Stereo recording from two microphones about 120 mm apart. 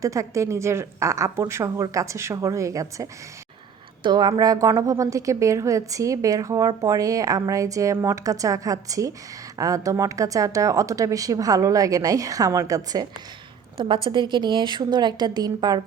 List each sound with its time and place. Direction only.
0.0 s a woman's voice: 25° right (ahead or behind)
4.0 s a woman's voice: 35° right (ahead or behind)
13.7 s a woman's voice: 45° right (ahead or behind)